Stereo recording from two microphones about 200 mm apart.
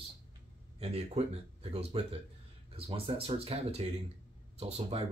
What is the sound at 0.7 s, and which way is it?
Speech, 30° right (ahead or behind).